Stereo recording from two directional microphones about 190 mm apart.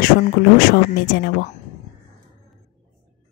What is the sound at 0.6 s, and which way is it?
Speech, 55° left (ahead or behind).